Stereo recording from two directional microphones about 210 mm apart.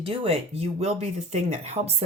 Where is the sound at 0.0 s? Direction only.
25° right (ahead or behind).